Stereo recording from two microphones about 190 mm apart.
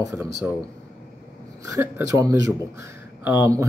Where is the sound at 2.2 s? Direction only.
20° right (ahead or behind).